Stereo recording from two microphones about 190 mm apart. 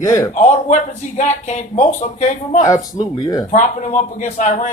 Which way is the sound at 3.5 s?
40° left (ahead or behind).